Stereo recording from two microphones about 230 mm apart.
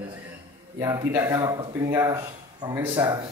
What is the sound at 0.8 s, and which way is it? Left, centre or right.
Speech, centre.